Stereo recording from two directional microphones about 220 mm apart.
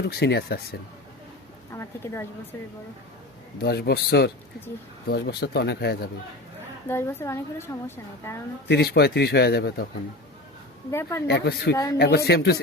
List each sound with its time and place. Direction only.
0.0 s a man's voice: 50° left (ahead or behind)
1.7 s a woman's voice: 10° left (ahead or behind)
3.6 s a man's voice: 50° left (ahead or behind)
6.8 s a woman's voice: 10° left (ahead or behind)
8.6 s a man's voice: 50° left (ahead or behind)
11.3 s a man's voice: 45° left (ahead or behind)
11.7 s a woman's voice: 15° left (ahead or behind)
11.9 s a man's voice: 50° left (ahead or behind)